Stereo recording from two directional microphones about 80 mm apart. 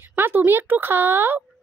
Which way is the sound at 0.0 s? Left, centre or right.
Right.